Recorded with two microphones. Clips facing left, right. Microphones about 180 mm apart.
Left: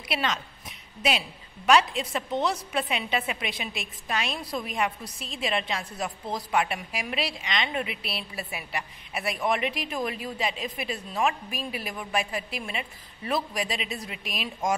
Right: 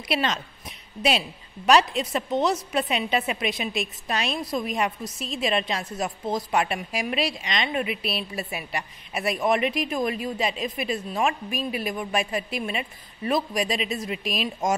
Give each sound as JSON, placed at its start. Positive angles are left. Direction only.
{"t": 0.1, "sound": "a woman's voice", "side_deg": -25}
{"t": 1.7, "sound": "a woman's voice", "side_deg": -25}